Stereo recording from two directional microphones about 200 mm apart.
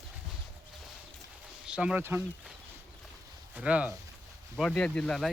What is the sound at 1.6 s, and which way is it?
Speech, 5° right (ahead or behind).